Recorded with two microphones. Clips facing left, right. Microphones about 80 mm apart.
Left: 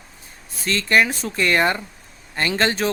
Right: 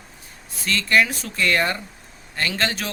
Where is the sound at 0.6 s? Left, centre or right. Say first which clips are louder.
Left 1 dB; left.